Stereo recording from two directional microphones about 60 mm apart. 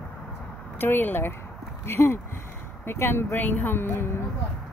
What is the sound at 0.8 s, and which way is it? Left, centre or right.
Speech, left.